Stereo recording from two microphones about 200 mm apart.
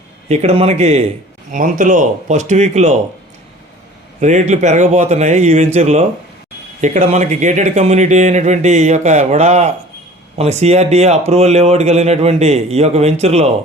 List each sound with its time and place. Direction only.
0.3 s speech: 30° right (ahead or behind)
4.2 s speech: 35° right (ahead or behind)